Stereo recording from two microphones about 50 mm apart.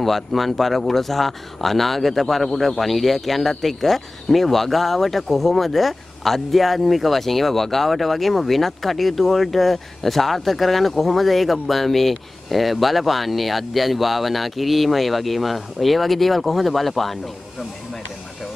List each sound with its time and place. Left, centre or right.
0.0 s speech: centre